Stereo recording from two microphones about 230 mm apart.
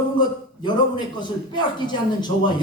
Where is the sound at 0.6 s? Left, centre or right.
Centre.